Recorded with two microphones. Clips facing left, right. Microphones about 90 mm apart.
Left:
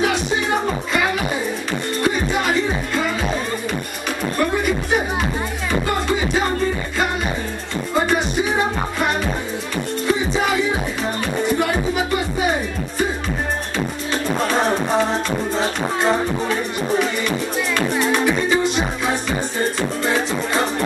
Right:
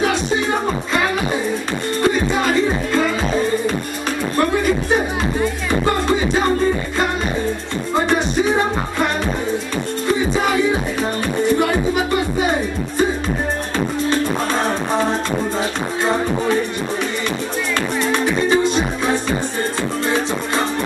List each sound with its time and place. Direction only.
18.0 s music: 20° left (ahead or behind)